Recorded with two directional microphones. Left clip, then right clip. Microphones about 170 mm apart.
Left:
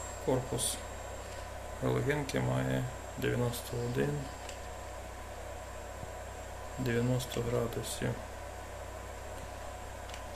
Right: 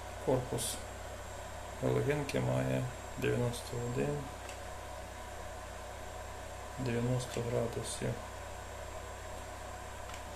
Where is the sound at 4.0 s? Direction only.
20° left (ahead or behind).